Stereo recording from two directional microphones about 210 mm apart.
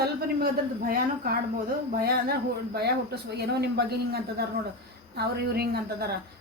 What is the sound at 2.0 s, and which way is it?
Speech, 50° right (ahead or behind).